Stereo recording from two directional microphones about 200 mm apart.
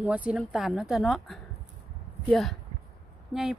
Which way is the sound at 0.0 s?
5° right (ahead or behind).